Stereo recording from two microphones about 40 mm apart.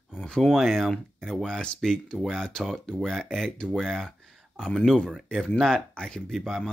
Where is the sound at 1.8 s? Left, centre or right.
Centre.